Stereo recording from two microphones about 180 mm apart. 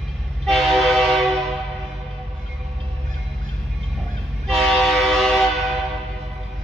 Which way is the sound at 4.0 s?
Centre (ahead or behind).